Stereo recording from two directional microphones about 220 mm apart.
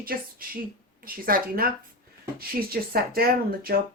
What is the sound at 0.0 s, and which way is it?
A woman's voice, 40° right (ahead or behind).